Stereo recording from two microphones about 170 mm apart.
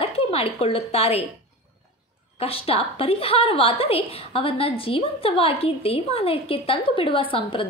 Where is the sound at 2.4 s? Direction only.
35° left (ahead or behind).